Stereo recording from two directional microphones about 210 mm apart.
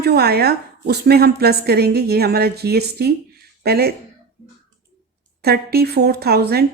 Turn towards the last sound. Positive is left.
turn(degrees=-50)  # may be behind; listen again after turning